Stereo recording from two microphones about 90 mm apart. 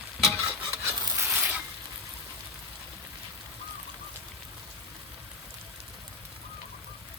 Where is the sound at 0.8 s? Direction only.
30° right (ahead or behind).